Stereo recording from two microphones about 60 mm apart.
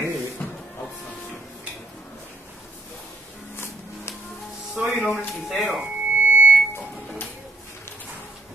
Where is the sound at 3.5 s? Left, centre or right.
Left.